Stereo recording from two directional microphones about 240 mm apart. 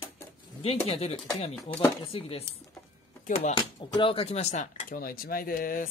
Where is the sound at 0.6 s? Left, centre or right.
Left.